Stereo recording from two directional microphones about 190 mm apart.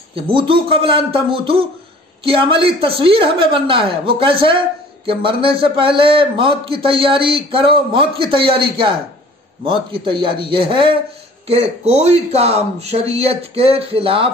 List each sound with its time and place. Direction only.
0.1 s a man's voice: 25° right (ahead or behind)